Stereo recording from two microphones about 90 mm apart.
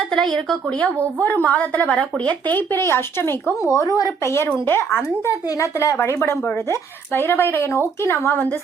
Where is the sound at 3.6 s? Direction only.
35° left (ahead or behind).